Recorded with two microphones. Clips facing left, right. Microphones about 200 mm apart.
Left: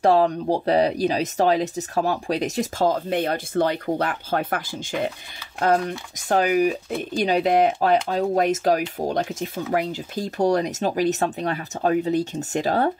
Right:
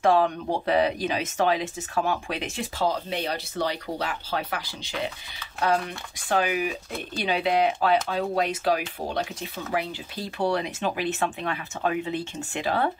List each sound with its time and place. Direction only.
0.0 s speech: 35° left (ahead or behind)